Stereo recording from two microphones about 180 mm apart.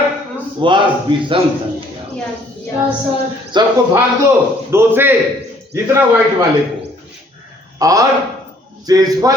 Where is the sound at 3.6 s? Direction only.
25° right (ahead or behind).